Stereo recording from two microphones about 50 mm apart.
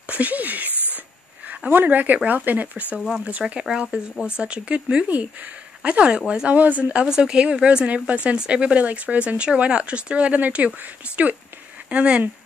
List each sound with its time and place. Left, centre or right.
0.0 s a sound: right
1.7 s a woman's voice: right
3.5 s a woman's voice: centre
11.9 s a woman's voice: right